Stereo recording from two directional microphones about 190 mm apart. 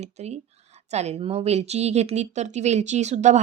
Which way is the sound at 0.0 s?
35° right (ahead or behind).